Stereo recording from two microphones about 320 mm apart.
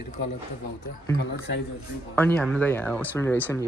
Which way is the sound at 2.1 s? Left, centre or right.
Centre.